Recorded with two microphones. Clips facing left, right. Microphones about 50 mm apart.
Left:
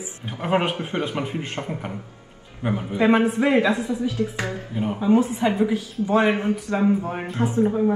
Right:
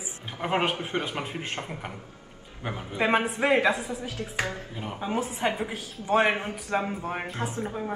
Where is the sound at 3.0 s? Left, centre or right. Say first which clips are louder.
Left 5 dB; right.